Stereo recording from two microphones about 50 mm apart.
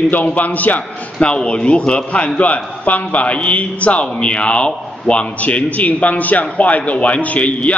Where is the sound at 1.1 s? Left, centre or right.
Left.